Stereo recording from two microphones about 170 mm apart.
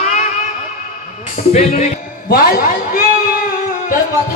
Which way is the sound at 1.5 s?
40° left (ahead or behind).